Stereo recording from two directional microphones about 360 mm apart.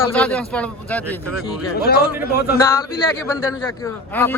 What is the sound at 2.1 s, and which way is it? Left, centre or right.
Speech, centre.